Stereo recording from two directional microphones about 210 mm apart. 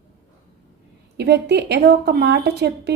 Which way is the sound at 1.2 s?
55° right (ahead or behind).